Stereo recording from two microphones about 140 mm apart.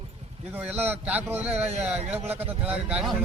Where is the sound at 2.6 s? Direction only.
10° right (ahead or behind).